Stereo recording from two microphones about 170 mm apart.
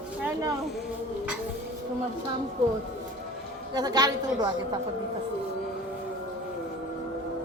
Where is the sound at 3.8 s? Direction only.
25° right (ahead or behind).